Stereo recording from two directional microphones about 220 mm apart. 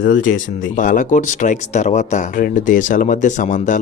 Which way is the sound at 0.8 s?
35° left (ahead or behind).